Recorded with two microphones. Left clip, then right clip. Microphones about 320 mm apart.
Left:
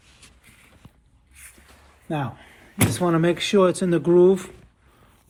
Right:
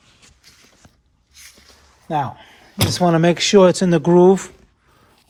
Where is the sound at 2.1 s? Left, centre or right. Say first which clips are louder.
Right 7 dB; right.